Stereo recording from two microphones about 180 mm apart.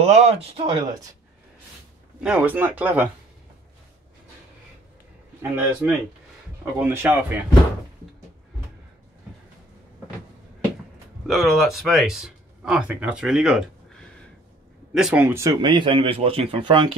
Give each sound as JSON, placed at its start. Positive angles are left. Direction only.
{"t": 0.0, "sound": "speech", "side_deg": -35}
{"t": 2.2, "sound": "speech", "side_deg": -5}
{"t": 5.4, "sound": "speech", "side_deg": -10}
{"t": 11.2, "sound": "speech", "side_deg": 0}
{"t": 15.0, "sound": "speech", "side_deg": -5}
{"t": 15.7, "sound": "speech", "side_deg": -25}